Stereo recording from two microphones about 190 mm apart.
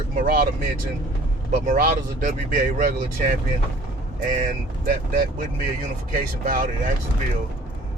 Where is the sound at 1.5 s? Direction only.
45° right (ahead or behind).